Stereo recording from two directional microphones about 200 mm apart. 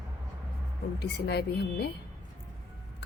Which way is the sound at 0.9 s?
55° left (ahead or behind).